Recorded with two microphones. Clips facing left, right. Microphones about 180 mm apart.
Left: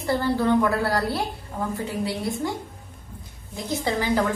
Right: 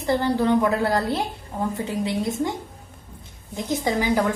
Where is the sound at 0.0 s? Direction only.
20° right (ahead or behind).